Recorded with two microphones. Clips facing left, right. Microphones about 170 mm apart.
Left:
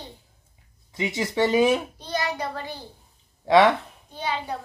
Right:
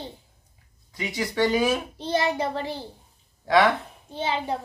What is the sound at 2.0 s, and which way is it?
Speech, 25° right (ahead or behind).